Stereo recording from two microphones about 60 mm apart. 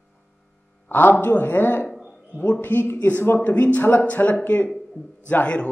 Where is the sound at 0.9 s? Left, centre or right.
Left.